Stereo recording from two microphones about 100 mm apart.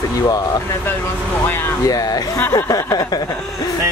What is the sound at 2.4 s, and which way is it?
Speech, 30° left (ahead or behind).